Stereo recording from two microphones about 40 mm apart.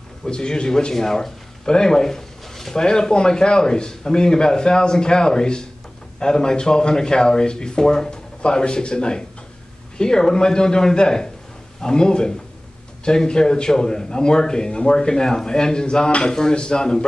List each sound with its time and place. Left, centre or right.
0.2 s a man's voice: centre